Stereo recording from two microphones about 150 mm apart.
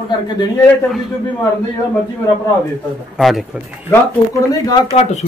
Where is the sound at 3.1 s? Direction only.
Centre (ahead or behind).